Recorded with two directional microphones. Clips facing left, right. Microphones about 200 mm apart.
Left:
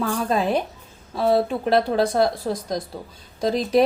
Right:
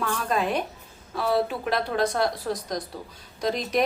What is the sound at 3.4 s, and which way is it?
Speech, 30° left (ahead or behind).